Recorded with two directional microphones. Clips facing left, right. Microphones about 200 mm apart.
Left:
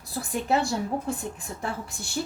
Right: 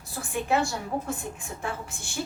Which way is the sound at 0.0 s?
35° left (ahead or behind).